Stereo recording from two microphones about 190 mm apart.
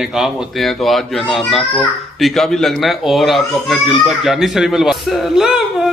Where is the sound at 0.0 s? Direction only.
5° right (ahead or behind).